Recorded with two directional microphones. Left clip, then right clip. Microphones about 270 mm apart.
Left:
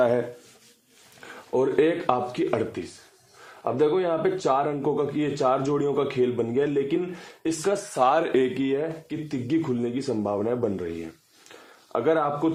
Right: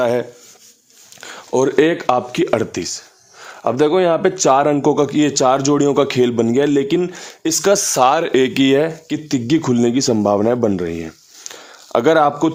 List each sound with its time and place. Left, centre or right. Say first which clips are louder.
0.0 s speech: right 5 dB; right
1.5 s a man's voice: right 7 dB; right
8.6 s a man's voice: right 12 dB; right